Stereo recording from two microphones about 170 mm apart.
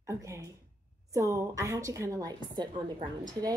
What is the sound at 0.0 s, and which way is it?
A woman's voice, 15° right (ahead or behind).